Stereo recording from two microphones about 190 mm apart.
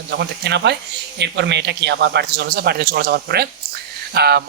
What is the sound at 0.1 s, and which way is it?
Speech, 65° right (ahead or behind).